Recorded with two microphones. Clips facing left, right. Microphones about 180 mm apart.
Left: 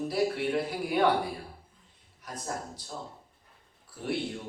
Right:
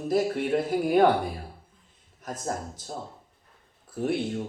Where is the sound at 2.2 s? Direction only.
45° right (ahead or behind).